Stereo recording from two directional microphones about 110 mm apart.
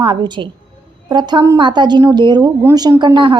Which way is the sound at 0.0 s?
45° right (ahead or behind).